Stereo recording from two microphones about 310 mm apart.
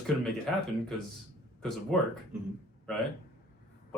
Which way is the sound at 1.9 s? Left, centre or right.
Centre.